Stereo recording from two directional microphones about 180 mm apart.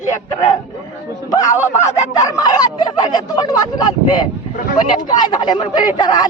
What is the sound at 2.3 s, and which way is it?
Speech, 20° left (ahead or behind).